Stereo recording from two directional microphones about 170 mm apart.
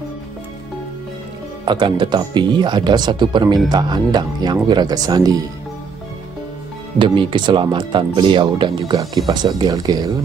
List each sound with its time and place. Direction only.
1.6 s speech: 25° right (ahead or behind)
7.0 s speech: 30° right (ahead or behind)